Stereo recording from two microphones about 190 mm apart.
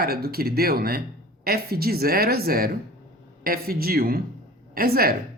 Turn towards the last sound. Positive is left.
turn(degrees=-50)  # may be behind; listen again after turning